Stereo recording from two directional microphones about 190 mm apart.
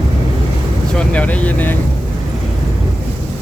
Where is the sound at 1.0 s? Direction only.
5° left (ahead or behind).